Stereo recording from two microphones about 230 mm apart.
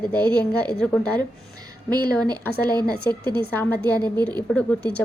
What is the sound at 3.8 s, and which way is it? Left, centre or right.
A woman's voice, centre.